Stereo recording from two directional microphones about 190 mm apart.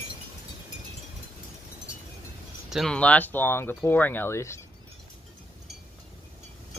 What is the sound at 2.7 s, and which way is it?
Speech, centre (ahead or behind).